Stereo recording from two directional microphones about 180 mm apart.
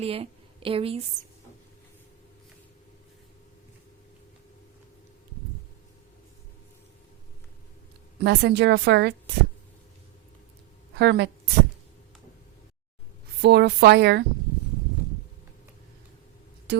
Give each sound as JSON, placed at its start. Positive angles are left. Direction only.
{"t": 0.0, "sound": "a woman's voice", "side_deg": -35}
{"t": 8.2, "sound": "a woman's voice", "side_deg": -70}
{"t": 10.9, "sound": "a woman's voice", "side_deg": -70}
{"t": 13.4, "sound": "a woman's voice", "side_deg": -70}